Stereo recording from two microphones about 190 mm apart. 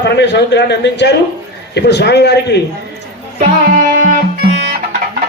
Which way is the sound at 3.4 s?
45° right (ahead or behind).